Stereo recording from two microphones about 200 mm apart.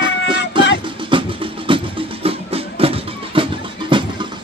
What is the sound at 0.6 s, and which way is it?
Music, 25° right (ahead or behind).